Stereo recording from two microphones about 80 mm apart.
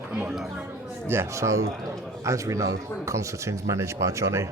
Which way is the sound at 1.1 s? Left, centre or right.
Right.